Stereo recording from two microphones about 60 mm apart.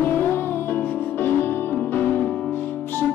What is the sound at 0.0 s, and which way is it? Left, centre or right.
Music, left.